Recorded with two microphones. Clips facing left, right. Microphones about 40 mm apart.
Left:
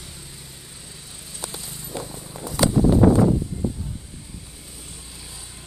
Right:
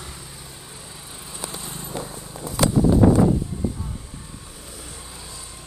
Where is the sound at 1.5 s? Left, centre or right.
Right.